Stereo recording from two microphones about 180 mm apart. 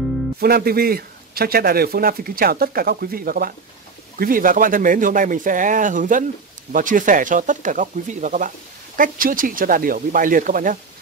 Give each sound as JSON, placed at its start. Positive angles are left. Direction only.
{"t": 0.4, "sound": "speech", "side_deg": -60}